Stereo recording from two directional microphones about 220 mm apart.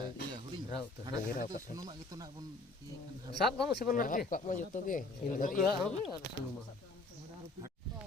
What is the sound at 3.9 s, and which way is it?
Speech, 40° left (ahead or behind).